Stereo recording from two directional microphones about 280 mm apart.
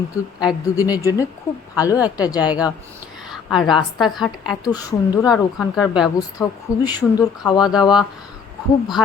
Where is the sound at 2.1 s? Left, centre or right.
Centre.